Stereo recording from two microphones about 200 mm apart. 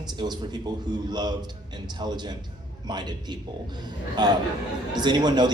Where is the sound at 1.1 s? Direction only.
20° right (ahead or behind).